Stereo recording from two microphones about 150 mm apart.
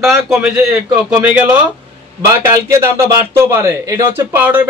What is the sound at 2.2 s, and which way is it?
A man's voice, 20° right (ahead or behind).